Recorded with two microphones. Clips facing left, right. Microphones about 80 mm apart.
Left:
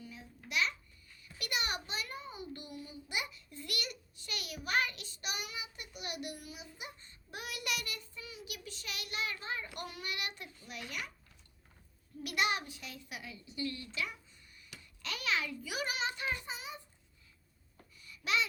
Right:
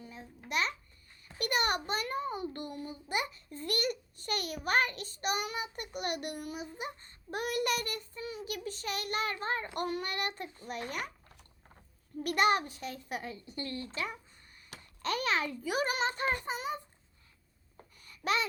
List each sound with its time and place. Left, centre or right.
0.0 s babbling: right
1.4 s a child's voice: right
12.2 s a child's voice: right
18.0 s a sound: right